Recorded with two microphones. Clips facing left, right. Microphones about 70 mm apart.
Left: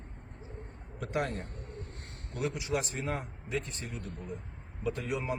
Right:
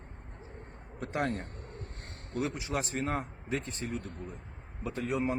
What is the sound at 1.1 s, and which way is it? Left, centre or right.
A man's voice, right.